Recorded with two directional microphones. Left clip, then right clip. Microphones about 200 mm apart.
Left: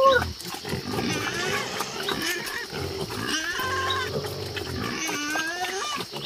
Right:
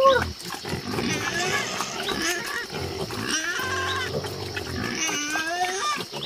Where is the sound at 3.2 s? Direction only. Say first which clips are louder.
Right 1 dB; 50° right (ahead or behind).